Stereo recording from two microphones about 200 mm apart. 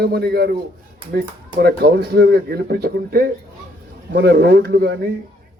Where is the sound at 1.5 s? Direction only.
50° right (ahead or behind).